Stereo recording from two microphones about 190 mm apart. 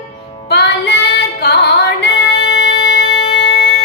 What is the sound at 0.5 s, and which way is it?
Music, 60° left (ahead or behind).